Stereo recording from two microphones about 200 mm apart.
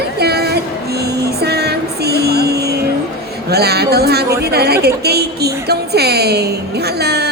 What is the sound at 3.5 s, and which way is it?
A woman's voice, 55° right (ahead or behind).